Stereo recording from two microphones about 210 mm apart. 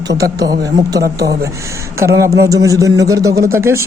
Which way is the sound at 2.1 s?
15° right (ahead or behind).